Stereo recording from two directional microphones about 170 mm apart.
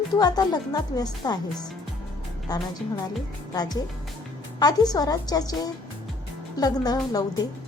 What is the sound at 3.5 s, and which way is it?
Speech, 25° left (ahead or behind).